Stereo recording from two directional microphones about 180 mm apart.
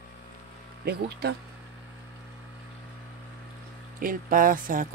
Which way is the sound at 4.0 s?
50° right (ahead or behind).